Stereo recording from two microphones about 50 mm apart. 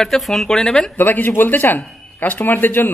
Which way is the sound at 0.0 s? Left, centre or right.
Centre.